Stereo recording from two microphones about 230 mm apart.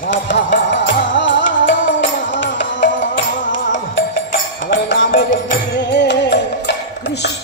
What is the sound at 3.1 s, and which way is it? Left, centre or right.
Music, left.